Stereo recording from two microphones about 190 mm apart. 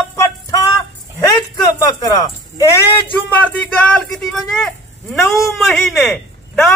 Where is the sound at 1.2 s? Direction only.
20° left (ahead or behind).